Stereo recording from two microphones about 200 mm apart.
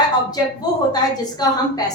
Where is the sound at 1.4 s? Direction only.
20° left (ahead or behind).